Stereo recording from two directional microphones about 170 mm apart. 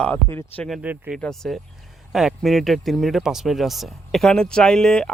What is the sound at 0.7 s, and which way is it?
Speech, 5° right (ahead or behind).